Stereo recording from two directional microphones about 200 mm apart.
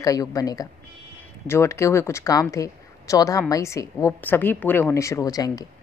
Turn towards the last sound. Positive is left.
turn(degrees=20)  # may be behind; listen again after turning